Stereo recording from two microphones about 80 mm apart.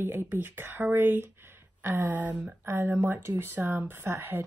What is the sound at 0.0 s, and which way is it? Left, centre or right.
Speech, right.